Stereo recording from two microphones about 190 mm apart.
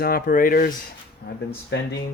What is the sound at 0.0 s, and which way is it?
Speech, 50° left (ahead or behind).